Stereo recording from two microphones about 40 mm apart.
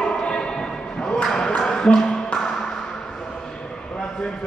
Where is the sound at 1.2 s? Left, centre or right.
Centre.